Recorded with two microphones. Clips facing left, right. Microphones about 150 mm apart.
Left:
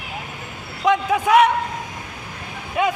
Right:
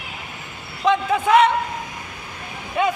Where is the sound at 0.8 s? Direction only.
10° left (ahead or behind).